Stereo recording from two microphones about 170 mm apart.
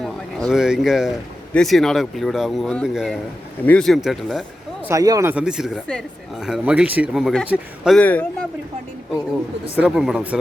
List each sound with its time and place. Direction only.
0.0 s speech: centre (ahead or behind)
4.8 s speech: 15° right (ahead or behind)
5.3 s speech: 5° right (ahead or behind)
7.9 s speech: 5° left (ahead or behind)
9.7 s speech: 5° right (ahead or behind)